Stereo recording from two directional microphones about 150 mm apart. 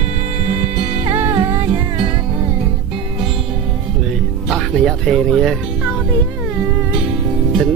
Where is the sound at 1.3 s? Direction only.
35° right (ahead or behind).